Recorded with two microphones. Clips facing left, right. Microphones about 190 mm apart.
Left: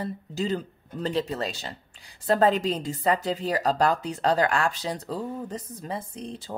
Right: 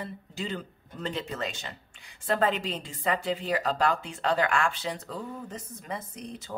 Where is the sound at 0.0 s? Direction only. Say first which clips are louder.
Left 6 dB; 40° left (ahead or behind).